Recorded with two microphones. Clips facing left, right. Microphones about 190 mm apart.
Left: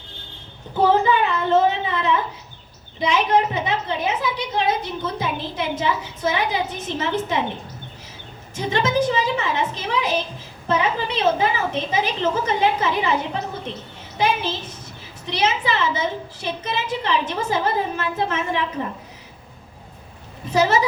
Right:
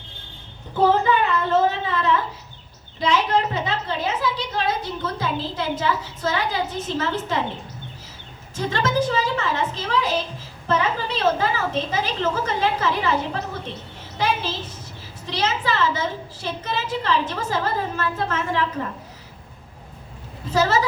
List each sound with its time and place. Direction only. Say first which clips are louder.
1.7 s a sound: even; 20° left (ahead or behind)
3.0 s a woman's voice: left 2 dB; 20° left (ahead or behind)
8.5 s a woman's voice: left 2 dB; 15° left (ahead or behind)
20.5 s a woman's voice: left 2 dB; 15° left (ahead or behind)